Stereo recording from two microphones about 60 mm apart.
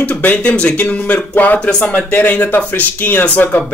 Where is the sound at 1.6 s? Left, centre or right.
Centre.